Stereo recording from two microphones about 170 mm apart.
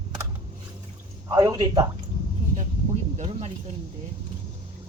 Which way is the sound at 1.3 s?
20° right (ahead or behind).